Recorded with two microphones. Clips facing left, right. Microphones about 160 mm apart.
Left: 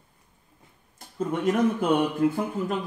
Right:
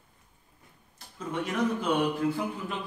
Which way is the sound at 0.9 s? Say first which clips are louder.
Left 5 dB; 50° left (ahead or behind).